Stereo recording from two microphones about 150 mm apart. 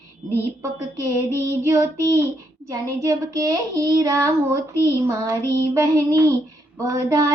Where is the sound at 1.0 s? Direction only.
20° right (ahead or behind).